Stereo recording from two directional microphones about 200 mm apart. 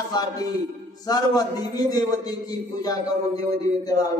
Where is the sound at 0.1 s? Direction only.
20° left (ahead or behind).